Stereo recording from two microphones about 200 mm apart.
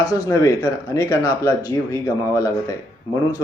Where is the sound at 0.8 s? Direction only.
15° left (ahead or behind).